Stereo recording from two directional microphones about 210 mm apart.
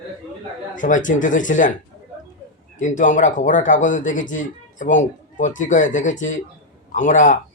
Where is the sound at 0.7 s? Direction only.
40° left (ahead or behind).